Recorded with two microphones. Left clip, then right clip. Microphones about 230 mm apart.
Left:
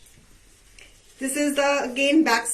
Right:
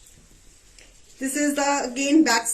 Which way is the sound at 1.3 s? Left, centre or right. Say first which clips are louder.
Left 1 dB; right.